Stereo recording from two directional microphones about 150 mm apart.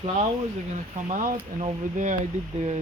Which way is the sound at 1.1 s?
65° right (ahead or behind).